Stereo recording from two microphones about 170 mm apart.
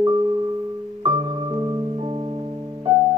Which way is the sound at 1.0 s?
25° right (ahead or behind).